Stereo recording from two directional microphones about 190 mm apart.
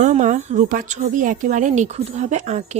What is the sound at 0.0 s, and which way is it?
Speech, 40° right (ahead or behind).